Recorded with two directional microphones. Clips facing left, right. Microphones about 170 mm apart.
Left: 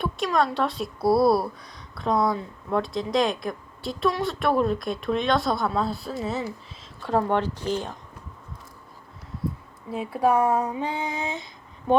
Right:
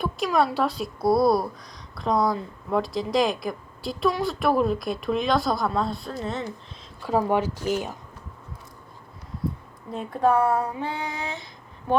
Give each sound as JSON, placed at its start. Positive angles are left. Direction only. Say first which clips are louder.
{"t": 0.0, "sound": "speech", "louder": "right 1 dB", "side_deg": 0}
{"t": 9.9, "sound": "speech", "louder": "even", "side_deg": 5}